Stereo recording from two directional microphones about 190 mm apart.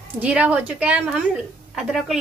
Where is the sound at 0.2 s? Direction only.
5° right (ahead or behind).